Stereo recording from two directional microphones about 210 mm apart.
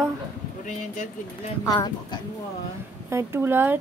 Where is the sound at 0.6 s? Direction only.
35° left (ahead or behind).